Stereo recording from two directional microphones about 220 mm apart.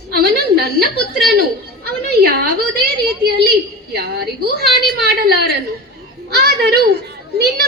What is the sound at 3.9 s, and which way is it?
A woman's voice, 45° right (ahead or behind).